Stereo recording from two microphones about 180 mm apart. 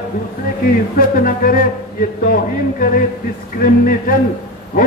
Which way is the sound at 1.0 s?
50° left (ahead or behind).